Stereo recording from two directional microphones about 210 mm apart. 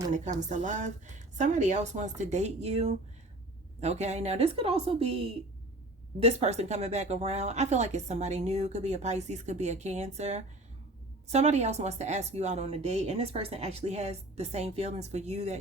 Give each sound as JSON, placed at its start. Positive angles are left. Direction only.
{"t": 0.1, "sound": "a woman's voice", "side_deg": -35}